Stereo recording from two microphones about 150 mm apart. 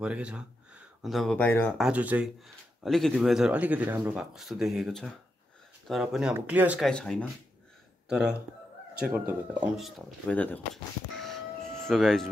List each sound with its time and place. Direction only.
0.0 s speech: 5° right (ahead or behind)
1.4 s speech: 15° left (ahead or behind)
1.8 s speech: 10° right (ahead or behind)
6.8 s speech: 5° left (ahead or behind)
8.1 s speech: 5° right (ahead or behind)
10.2 s speech: 10° left (ahead or behind)
11.8 s speech: centre (ahead or behind)